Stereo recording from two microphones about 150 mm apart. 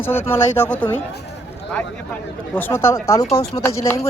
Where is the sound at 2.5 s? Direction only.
15° left (ahead or behind).